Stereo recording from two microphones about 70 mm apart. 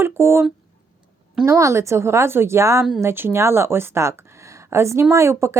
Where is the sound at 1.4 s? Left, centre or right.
Right.